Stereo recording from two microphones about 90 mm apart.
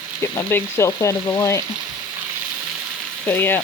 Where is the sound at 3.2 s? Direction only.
25° left (ahead or behind).